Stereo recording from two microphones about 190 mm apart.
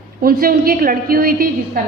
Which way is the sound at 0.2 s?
50° right (ahead or behind).